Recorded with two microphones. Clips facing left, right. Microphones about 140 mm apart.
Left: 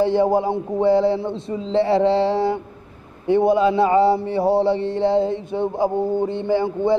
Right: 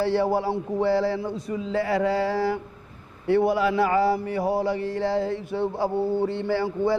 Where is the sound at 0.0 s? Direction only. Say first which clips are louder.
Left 5 dB; 20° left (ahead or behind).